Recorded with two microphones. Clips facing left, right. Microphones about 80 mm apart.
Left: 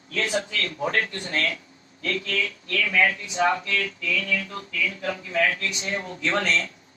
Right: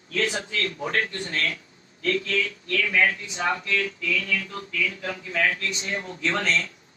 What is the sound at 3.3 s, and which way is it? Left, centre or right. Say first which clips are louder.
Speech: left 4 dB; left.